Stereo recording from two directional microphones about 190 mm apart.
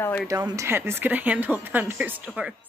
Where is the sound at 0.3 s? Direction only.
15° right (ahead or behind).